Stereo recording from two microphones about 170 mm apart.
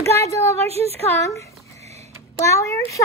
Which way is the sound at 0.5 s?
35° right (ahead or behind).